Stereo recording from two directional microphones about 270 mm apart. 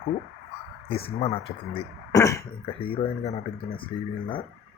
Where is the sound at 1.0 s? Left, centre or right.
Left.